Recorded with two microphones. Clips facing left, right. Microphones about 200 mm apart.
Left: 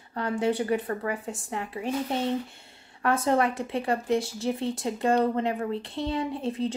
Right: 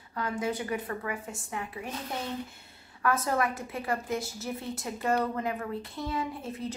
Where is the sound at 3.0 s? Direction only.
25° left (ahead or behind).